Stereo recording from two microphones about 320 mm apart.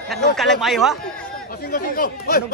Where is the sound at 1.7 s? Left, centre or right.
Left.